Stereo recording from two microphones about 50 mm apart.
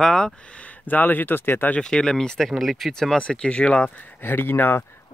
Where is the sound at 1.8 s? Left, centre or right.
Centre.